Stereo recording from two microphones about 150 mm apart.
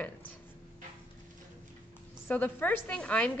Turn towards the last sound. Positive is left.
turn(degrees=10)  # may be behind; listen again after turning